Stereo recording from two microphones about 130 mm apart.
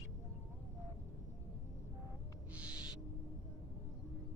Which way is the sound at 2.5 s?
10° right (ahead or behind).